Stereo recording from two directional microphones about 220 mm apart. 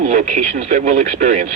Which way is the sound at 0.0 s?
35° right (ahead or behind).